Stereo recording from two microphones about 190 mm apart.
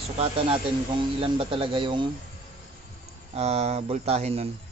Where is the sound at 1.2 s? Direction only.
30° right (ahead or behind).